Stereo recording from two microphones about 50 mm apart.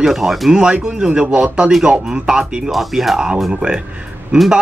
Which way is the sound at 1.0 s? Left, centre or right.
Centre.